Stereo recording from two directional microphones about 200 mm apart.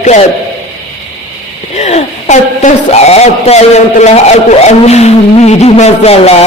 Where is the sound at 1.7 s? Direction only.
35° left (ahead or behind).